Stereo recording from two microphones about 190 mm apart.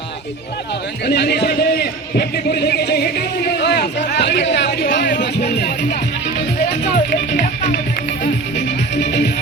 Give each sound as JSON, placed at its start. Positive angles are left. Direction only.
{"t": 1.0, "sound": "a man's voice", "side_deg": 60}
{"t": 6.8, "sound": "speech", "side_deg": 45}
{"t": 8.5, "sound": "music", "side_deg": 65}